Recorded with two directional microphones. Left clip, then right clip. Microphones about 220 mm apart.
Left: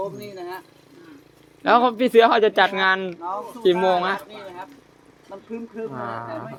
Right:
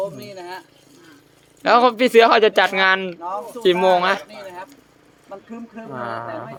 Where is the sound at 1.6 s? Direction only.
15° right (ahead or behind).